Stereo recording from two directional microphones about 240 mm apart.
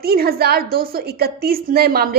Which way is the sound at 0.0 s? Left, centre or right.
Right.